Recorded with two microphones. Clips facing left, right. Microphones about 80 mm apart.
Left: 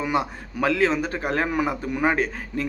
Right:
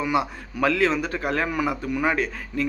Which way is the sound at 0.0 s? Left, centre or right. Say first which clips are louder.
Right 1 dB; left.